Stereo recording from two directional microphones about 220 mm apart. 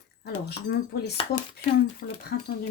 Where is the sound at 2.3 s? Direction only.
50° left (ahead or behind).